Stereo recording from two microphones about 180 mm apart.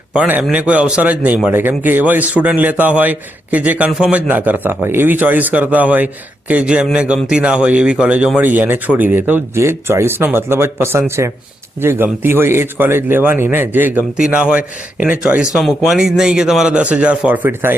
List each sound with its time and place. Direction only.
0.1 s a man's voice: 10° right (ahead or behind)